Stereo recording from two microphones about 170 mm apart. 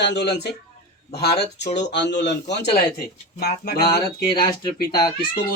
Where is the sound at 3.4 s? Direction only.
70° left (ahead or behind).